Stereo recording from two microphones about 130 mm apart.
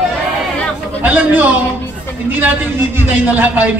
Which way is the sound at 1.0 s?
15° right (ahead or behind).